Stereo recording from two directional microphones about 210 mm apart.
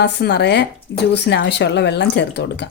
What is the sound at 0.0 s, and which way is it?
Speech, 55° left (ahead or behind).